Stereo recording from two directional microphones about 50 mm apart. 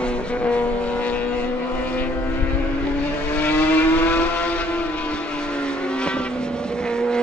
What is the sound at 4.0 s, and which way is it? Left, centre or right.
Vehicle, left.